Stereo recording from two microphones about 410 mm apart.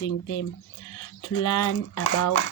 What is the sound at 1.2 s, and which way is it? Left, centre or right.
Speech, left.